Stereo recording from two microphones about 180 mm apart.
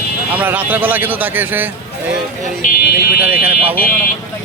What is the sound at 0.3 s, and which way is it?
A man's voice, 10° right (ahead or behind).